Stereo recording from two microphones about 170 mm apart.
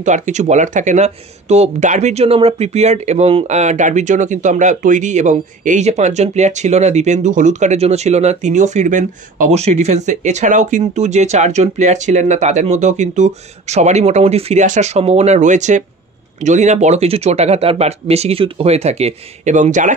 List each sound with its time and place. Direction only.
0.0 s speech: 45° right (ahead or behind)